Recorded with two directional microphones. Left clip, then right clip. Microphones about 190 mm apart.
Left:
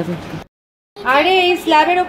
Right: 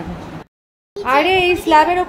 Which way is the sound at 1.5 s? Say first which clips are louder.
Even; 10° right (ahead or behind).